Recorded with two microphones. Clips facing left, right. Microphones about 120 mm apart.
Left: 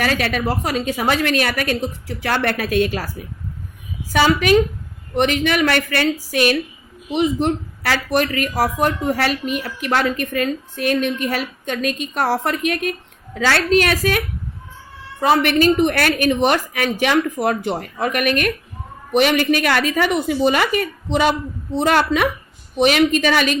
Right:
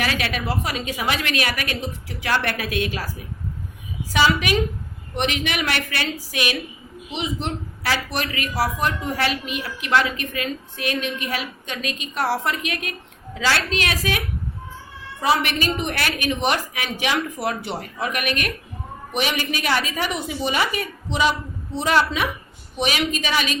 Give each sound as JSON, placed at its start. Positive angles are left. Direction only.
{"t": 0.0, "sound": "speech", "side_deg": 45}
{"t": 4.1, "sound": "speech", "side_deg": 45}
{"t": 15.2, "sound": "speech", "side_deg": 50}